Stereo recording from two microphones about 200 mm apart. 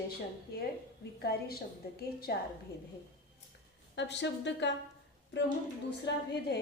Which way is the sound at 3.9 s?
60° left (ahead or behind).